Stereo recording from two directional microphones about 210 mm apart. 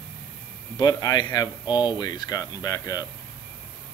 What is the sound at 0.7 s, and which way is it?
Speech, 20° left (ahead or behind).